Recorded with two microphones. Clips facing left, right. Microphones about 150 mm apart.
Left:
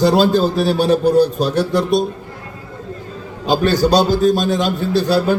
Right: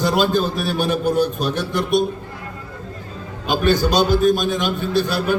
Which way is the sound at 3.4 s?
35° left (ahead or behind).